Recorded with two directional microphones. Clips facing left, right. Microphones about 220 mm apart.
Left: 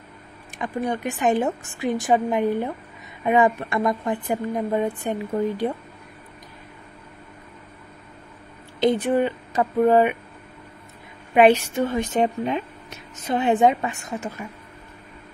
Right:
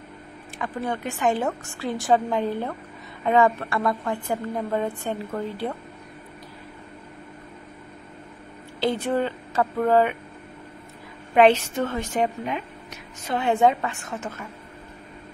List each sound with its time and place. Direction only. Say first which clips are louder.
0.6 s speech: left 3 dB; 15° left (ahead or behind)
8.7 s a woman's voice: left 4 dB; 15° left (ahead or behind)
11.3 s speech: left 1 dB; 10° left (ahead or behind)